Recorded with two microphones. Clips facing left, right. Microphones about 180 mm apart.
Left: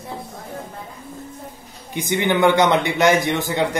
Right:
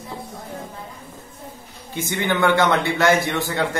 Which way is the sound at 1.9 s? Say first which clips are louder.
Left 3 dB; 15° left (ahead or behind).